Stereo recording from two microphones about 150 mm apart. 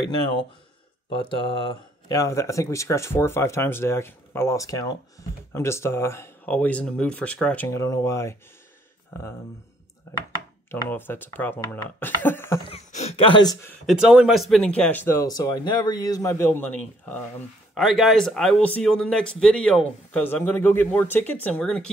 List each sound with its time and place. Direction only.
1.3 s speech: 25° left (ahead or behind)
10.7 s speech: 15° left (ahead or behind)
12.6 s speech: 45° left (ahead or behind); by 13.6 s 30° left (ahead or behind)
13.8 s speech: 5° right (ahead or behind)
14.8 s speech: 10° left (ahead or behind)
17.7 s speech: centre (ahead or behind)